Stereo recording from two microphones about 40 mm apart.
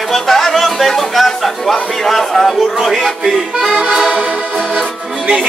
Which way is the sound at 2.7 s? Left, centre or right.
Centre.